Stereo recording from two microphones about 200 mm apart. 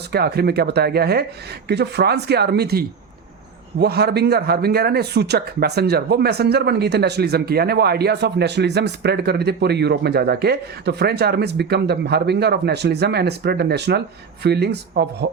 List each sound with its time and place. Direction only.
0.1 s speech: 50° right (ahead or behind)